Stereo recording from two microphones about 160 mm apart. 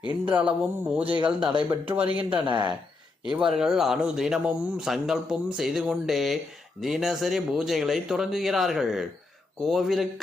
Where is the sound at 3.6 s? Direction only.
Centre (ahead or behind).